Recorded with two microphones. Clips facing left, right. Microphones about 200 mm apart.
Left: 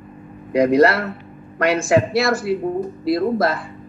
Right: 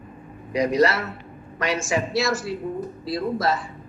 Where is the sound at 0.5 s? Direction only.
55° left (ahead or behind).